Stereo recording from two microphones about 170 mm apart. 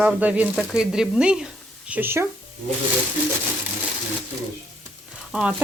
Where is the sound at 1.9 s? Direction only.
10° right (ahead or behind).